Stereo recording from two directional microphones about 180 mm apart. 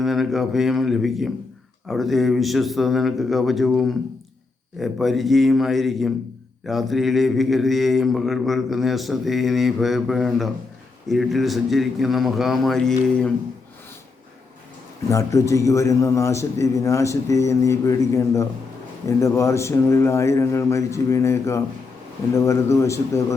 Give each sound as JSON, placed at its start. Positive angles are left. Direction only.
{"t": 0.0, "sound": "mantra", "side_deg": 0}
{"t": 15.1, "sound": "a man's voice", "side_deg": 15}